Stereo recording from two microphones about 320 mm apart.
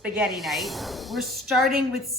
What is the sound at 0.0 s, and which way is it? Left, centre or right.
A woman's voice, centre.